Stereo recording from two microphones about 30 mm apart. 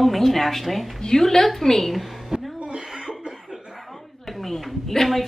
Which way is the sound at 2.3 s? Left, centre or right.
Right.